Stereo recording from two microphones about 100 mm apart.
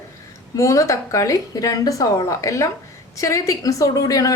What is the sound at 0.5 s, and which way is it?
A woman's voice, 30° left (ahead or behind).